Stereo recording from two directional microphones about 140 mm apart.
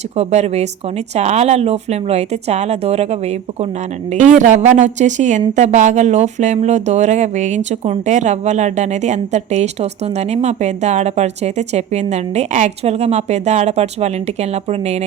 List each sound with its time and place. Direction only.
0.2 s speech: 50° right (ahead or behind)
4.1 s speech: 60° right (ahead or behind)